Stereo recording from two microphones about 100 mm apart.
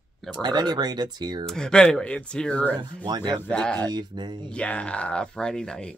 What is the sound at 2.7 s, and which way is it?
Speech, 45° right (ahead or behind).